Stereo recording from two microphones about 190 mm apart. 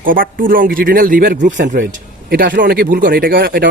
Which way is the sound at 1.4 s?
75° right (ahead or behind).